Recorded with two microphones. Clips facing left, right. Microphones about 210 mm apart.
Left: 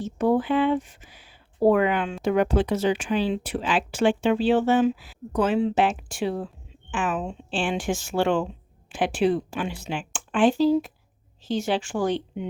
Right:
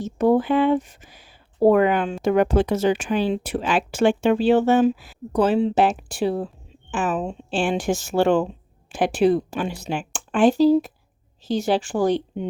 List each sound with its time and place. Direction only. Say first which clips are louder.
0.0 s speech: right 4 dB; 40° right (ahead or behind)